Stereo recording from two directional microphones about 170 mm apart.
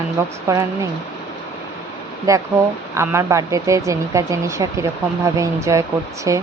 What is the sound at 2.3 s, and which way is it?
Speech, 20° right (ahead or behind).